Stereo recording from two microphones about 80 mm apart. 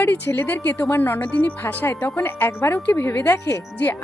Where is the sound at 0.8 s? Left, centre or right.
Left.